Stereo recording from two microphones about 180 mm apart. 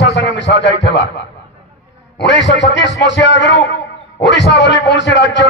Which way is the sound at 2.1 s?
75° left (ahead or behind).